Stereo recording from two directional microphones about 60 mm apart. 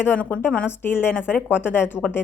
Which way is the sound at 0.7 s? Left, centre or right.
Left.